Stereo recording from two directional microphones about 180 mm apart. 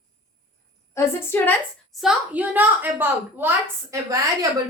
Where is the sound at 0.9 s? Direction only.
10° left (ahead or behind).